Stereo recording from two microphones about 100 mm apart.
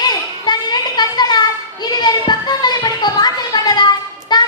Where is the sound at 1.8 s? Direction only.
45° left (ahead or behind).